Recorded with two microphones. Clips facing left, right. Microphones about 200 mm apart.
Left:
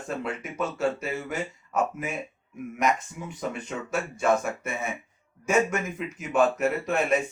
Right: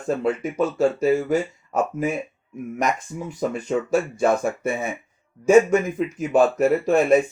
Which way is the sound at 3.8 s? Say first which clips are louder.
Right 3 dB; 35° right (ahead or behind).